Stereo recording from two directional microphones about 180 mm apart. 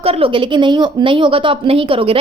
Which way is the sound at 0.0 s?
30° right (ahead or behind).